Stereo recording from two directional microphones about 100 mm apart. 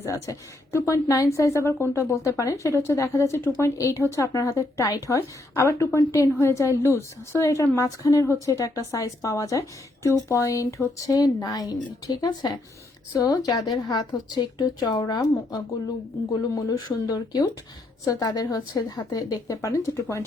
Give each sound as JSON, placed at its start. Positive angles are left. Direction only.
{"t": 0.0, "sound": "a woman's voice", "side_deg": 30}